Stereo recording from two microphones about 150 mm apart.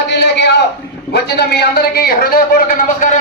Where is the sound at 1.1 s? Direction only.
90° left.